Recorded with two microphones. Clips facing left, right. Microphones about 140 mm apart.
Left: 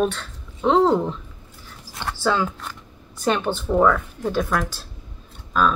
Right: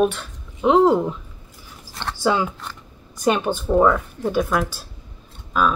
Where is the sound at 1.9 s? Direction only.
5° left (ahead or behind).